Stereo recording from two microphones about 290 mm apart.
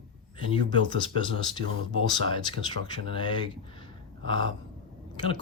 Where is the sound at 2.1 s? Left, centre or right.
Centre.